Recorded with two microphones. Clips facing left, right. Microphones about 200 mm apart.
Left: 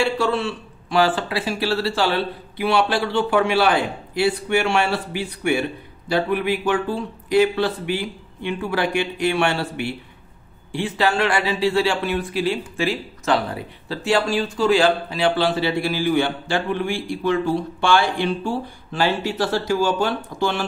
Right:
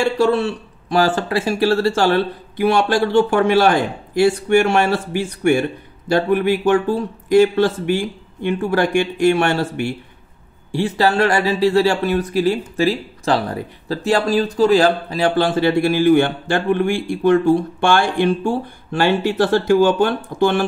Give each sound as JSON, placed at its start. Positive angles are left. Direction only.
{"t": 0.0, "sound": "speech", "side_deg": -40}